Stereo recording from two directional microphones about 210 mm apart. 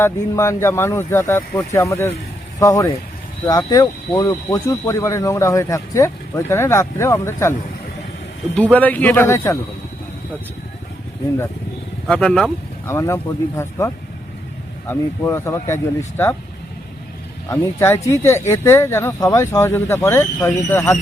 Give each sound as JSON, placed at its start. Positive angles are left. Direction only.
{"t": 0.0, "sound": "speech", "side_deg": 15}
{"t": 8.7, "sound": "speech", "side_deg": 5}
{"t": 12.0, "sound": "speech", "side_deg": 5}
{"t": 17.5, "sound": "speech", "side_deg": 10}